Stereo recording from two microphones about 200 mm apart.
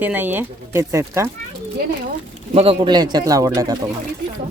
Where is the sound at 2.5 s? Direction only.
25° right (ahead or behind).